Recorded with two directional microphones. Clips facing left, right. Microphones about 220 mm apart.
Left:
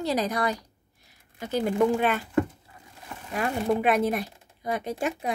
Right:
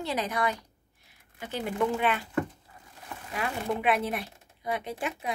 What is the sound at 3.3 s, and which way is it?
Speech, 45° left (ahead or behind).